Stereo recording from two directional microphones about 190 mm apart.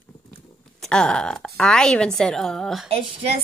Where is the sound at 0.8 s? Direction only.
5° left (ahead or behind).